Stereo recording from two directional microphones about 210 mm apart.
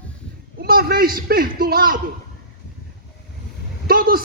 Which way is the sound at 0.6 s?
45° right (ahead or behind).